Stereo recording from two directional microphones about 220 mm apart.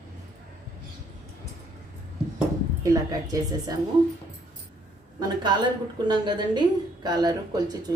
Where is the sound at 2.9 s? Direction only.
15° right (ahead or behind).